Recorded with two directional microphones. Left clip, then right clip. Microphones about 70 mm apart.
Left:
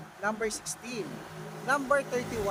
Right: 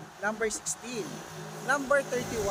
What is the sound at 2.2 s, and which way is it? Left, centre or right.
Speech, right.